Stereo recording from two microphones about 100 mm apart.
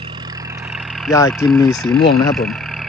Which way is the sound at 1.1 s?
30° left (ahead or behind).